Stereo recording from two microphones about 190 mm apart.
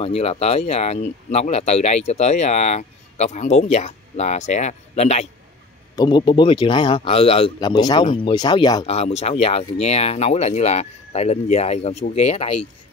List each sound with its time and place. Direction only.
0.0 s speech: 35° left (ahead or behind)
5.9 s a man's voice: 25° left (ahead or behind)
8.8 s speech: 35° left (ahead or behind)